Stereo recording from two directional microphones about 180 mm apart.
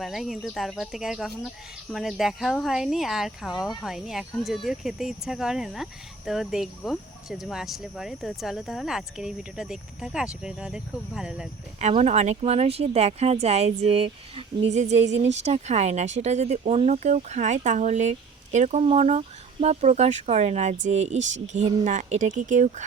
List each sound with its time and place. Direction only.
0.0 s speech: centre (ahead or behind)
11.8 s speech: 40° right (ahead or behind)